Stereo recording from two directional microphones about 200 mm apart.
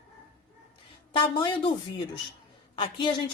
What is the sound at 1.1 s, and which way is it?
Speech, 25° left (ahead or behind).